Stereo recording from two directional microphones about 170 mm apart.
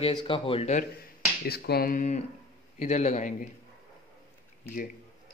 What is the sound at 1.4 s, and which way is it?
Finger snapping, 70° left (ahead or behind).